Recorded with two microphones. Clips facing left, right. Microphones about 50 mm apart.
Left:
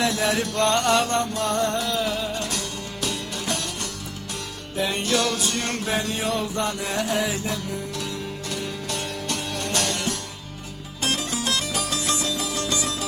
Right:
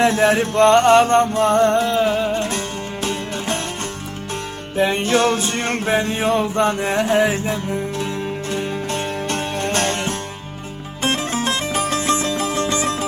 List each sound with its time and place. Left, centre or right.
0.0 s music: right
4.8 s music: right